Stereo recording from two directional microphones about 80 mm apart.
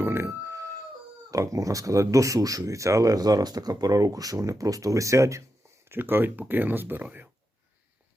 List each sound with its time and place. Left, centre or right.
0.0 s a sound: right
1.3 s speech: right
5.9 s speech: right